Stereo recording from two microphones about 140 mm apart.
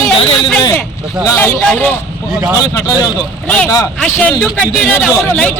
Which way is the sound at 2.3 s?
10° right (ahead or behind).